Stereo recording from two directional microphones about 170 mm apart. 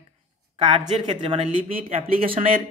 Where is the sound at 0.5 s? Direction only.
30° right (ahead or behind).